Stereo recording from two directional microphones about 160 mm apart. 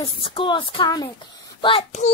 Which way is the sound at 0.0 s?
35° left (ahead or behind).